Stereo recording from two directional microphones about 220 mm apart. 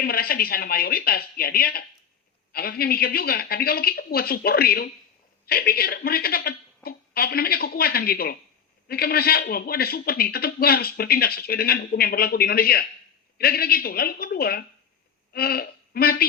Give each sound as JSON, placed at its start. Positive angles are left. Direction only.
{"t": 0.0, "sound": "a man's voice", "side_deg": 45}